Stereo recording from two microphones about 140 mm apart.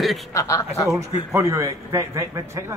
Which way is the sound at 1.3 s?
20° right (ahead or behind).